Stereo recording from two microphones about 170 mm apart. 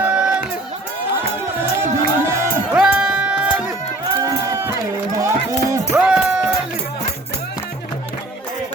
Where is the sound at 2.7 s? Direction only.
5° right (ahead or behind).